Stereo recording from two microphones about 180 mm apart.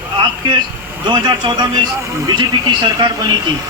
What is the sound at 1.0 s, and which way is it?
A man's voice, 25° right (ahead or behind).